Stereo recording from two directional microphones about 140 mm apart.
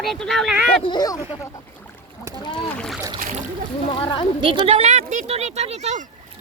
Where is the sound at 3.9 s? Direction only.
35° left (ahead or behind).